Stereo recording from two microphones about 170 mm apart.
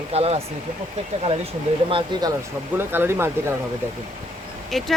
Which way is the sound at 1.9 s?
25° right (ahead or behind).